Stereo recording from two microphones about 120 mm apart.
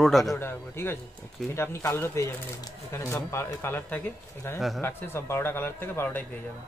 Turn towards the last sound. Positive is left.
turn(degrees=15)  # may be behind; listen again after turning